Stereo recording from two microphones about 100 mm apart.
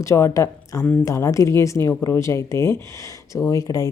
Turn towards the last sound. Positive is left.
turn(degrees=35)  # may be behind; listen again after turning